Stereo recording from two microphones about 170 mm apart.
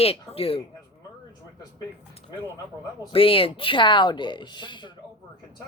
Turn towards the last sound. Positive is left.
turn(degrees=25)  # may be behind; listen again after turning